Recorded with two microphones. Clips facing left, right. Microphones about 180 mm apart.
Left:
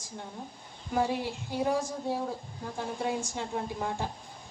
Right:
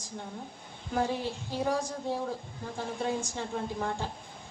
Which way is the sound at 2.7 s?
15° left (ahead or behind).